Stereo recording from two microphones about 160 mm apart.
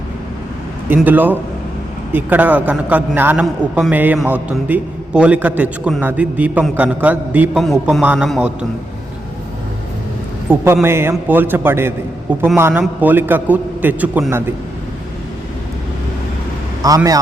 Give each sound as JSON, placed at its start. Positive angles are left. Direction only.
{"t": 0.9, "sound": "a man's voice", "side_deg": -10}
{"t": 7.6, "sound": "speech", "side_deg": 0}
{"t": 10.5, "sound": "a man's voice", "side_deg": -15}
{"t": 16.8, "sound": "speech", "side_deg": -20}